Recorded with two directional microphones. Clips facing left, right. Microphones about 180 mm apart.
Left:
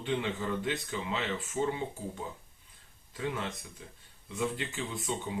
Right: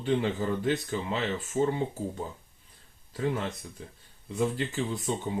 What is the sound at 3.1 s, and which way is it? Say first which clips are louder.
Speech: right 5 dB; 40° right (ahead or behind).